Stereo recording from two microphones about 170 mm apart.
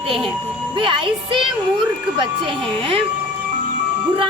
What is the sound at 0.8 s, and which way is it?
Speech, 30° right (ahead or behind).